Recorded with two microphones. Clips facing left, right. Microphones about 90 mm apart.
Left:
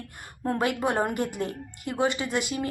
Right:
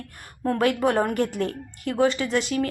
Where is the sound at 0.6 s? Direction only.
15° left (ahead or behind).